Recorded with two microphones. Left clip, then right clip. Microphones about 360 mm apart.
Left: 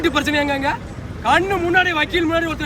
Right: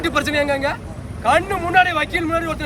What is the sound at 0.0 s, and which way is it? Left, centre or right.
Speech, centre.